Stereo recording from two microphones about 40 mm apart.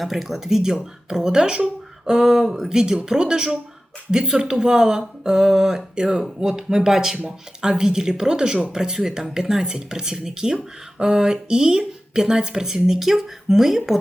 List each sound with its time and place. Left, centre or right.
0.0 s speech: centre; by 2.1 s right
2.1 s speech: centre